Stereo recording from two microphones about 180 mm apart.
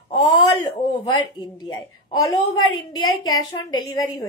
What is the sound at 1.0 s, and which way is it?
A woman's voice, 25° left (ahead or behind).